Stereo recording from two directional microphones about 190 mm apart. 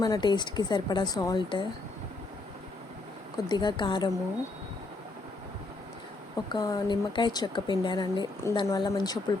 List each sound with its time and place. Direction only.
0.0 s speech: 20° left (ahead or behind)
3.3 s speech: 20° left (ahead or behind)
6.5 s speech: 20° left (ahead or behind)